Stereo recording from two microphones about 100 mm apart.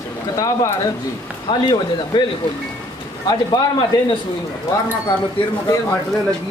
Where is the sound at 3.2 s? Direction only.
45° left (ahead or behind).